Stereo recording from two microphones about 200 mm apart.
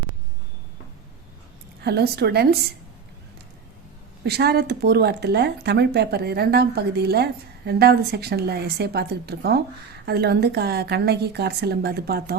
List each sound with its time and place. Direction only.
1.8 s speech: 55° right (ahead or behind)
4.2 s speech: 55° right (ahead or behind)